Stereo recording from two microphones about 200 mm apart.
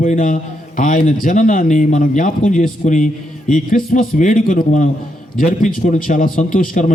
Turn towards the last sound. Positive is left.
turn(degrees=40)  # may be behind; listen again after turning